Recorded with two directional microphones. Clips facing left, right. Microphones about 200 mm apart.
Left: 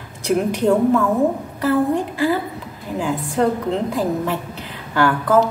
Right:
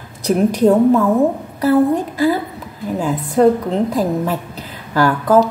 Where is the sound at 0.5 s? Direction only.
40° right (ahead or behind).